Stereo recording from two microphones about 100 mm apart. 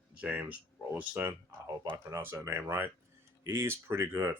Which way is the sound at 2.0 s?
30° right (ahead or behind).